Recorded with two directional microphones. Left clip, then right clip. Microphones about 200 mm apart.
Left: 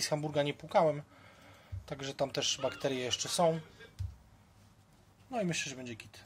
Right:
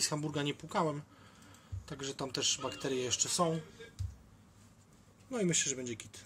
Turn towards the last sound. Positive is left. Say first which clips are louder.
# right 3 dB
turn(degrees=10)  # may be behind; listen again after turning